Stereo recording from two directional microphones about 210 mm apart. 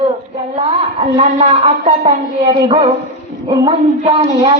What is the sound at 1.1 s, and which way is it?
Speech, 30° right (ahead or behind).